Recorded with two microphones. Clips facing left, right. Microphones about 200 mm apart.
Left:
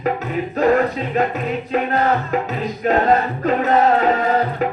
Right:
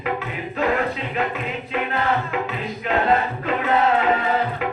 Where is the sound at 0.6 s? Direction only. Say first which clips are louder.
Left 6 dB; 40° left (ahead or behind).